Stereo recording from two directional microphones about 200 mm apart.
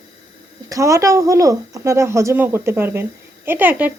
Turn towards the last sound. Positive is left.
turn(degrees=-10)  # may be behind; listen again after turning